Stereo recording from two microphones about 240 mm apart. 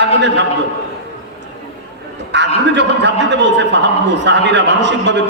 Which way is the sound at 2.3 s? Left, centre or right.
Right.